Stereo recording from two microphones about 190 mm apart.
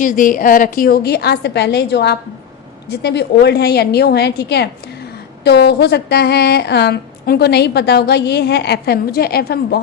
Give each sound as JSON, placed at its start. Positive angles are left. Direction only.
{"t": 0.0, "sound": "a woman's voice", "side_deg": 45}